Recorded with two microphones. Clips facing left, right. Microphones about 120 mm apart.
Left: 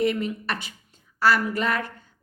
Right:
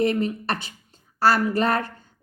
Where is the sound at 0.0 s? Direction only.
35° right (ahead or behind).